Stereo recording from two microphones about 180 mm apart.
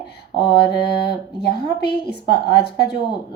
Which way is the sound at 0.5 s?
65° left (ahead or behind).